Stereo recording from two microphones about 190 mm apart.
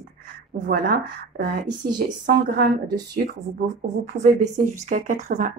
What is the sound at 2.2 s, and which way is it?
Speech, 55° right (ahead or behind).